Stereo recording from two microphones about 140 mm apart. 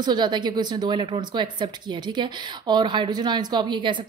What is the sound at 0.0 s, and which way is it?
A woman's voice, 30° right (ahead or behind).